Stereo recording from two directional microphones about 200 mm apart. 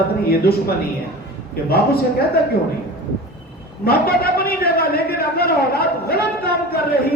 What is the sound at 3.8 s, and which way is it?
A man's voice, 50° left (ahead or behind).